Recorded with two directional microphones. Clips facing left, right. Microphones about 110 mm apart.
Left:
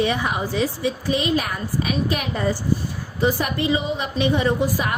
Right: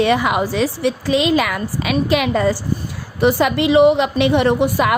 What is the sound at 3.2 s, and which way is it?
A woman's voice, 80° right.